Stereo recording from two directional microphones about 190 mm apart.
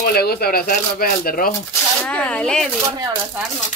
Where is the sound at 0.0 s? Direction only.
55° left (ahead or behind).